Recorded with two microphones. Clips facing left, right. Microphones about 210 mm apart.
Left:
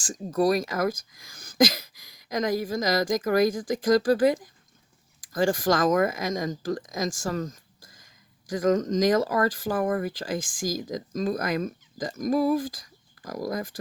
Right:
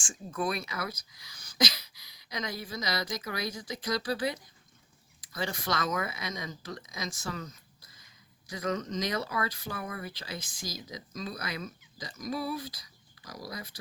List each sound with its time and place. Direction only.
0.0 s speech: 40° left (ahead or behind)